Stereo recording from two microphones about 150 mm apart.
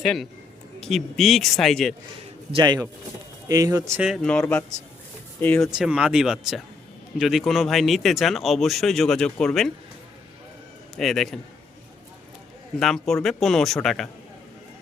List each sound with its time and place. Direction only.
0.0 s speech: centre (ahead or behind)
2.5 s speech: 30° right (ahead or behind)
4.2 s speech: 5° left (ahead or behind)
5.7 s speech: 5° right (ahead or behind)
10.9 s speech: centre (ahead or behind)
12.8 s speech: centre (ahead or behind)